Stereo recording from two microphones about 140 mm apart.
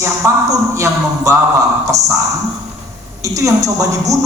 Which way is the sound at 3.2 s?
25° right (ahead or behind).